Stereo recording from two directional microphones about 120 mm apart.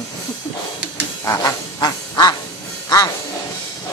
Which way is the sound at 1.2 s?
25° left (ahead or behind).